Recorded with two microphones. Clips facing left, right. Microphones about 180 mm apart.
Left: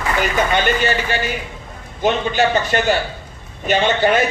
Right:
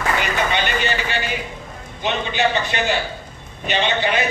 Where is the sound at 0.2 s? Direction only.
45° left (ahead or behind).